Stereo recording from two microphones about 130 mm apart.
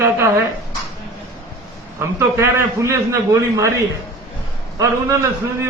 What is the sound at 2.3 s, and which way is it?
A man's voice, 20° right (ahead or behind).